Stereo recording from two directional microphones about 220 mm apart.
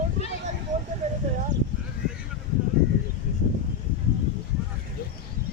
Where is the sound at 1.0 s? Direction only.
30° right (ahead or behind).